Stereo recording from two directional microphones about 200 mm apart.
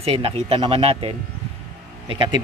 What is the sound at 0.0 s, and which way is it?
Speech, 30° right (ahead or behind).